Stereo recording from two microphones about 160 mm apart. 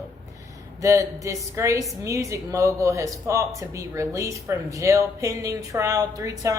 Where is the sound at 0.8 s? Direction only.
20° right (ahead or behind).